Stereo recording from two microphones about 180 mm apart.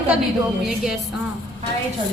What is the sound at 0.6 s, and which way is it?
Speech, centre (ahead or behind).